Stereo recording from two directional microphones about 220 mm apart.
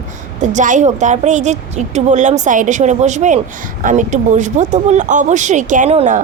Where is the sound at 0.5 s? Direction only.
35° right (ahead or behind).